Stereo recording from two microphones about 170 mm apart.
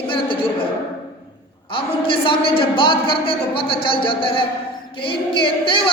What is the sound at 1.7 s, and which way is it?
A woman's voice, 30° left (ahead or behind).